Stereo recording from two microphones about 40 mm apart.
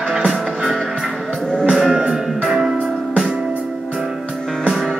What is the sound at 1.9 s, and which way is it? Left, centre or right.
Music, right.